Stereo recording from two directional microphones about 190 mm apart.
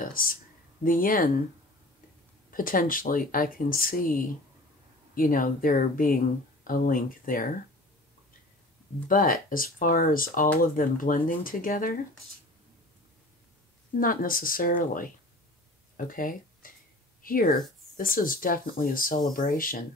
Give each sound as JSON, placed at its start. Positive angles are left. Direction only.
{"t": 0.0, "sound": "a sound", "side_deg": 50}
{"t": 0.8, "sound": "speech", "side_deg": 45}
{"t": 2.5, "sound": "speech", "side_deg": 45}
{"t": 9.1, "sound": "speech", "side_deg": 50}
{"t": 13.9, "sound": "speech", "side_deg": 45}
{"t": 16.1, "sound": "speech", "side_deg": 45}